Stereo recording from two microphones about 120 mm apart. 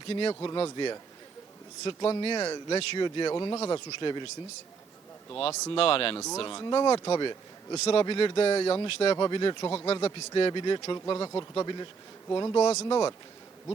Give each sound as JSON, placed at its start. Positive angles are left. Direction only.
{"t": 0.1, "sound": "speech", "side_deg": 45}
{"t": 5.7, "sound": "speech", "side_deg": 50}
{"t": 6.1, "sound": "speech", "side_deg": 30}
{"t": 9.1, "sound": "speech", "side_deg": 40}